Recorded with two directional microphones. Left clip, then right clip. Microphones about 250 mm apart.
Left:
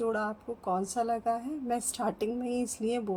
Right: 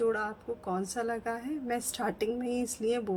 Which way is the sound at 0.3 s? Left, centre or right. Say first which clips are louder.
Left 2 dB; right.